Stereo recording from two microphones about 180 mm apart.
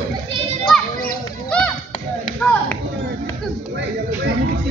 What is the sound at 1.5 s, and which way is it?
Chop, 5° left (ahead or behind).